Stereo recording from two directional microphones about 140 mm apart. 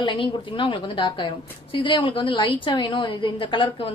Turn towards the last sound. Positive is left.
turn(degrees=40)  # may be behind; listen again after turning